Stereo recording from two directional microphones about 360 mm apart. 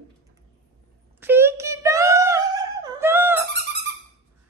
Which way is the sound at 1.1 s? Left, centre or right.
Centre.